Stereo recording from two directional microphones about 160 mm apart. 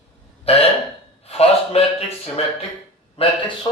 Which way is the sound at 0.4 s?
40° left (ahead or behind).